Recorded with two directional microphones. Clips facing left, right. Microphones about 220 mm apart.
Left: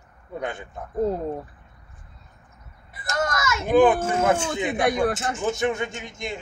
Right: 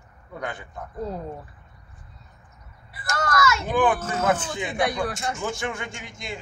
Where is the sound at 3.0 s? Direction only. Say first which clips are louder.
Right 2 dB; 20° left (ahead or behind).